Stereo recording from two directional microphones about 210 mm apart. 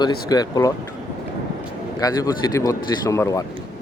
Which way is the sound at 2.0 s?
15° left (ahead or behind).